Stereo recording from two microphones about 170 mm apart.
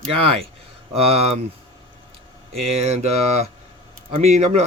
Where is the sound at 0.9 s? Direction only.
35° right (ahead or behind).